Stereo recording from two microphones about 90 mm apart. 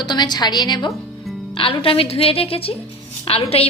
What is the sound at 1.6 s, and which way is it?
A woman's voice, 85° left.